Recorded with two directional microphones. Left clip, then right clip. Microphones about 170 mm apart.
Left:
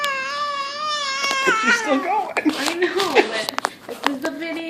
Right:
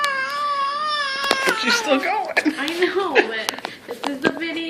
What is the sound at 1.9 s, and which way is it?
Speech, 10° left (ahead or behind).